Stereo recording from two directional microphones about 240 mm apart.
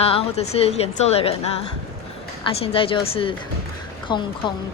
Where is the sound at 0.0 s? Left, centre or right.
Left.